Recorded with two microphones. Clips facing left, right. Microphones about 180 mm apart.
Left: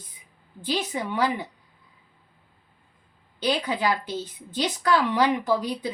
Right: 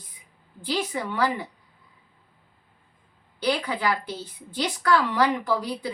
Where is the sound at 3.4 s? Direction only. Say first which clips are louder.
Left 1 dB; 20° left (ahead or behind).